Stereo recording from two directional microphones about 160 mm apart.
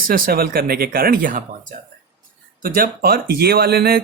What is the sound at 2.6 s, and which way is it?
Speech, 65° right (ahead or behind).